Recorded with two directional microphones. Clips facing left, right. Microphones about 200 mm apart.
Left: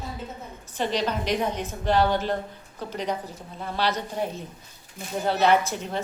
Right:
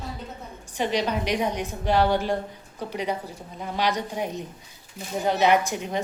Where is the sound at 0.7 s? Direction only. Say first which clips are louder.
Right 1 dB; 15° right (ahead or behind).